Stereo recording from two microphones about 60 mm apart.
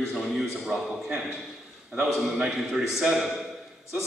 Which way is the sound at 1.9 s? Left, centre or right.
Centre.